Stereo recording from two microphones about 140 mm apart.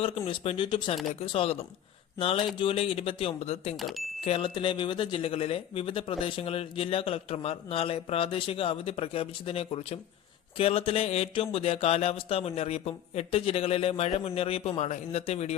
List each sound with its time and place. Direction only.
0.0 s speech: 40° left (ahead or behind)
3.8 s speech: centre (ahead or behind)
4.2 s speech: 40° left (ahead or behind)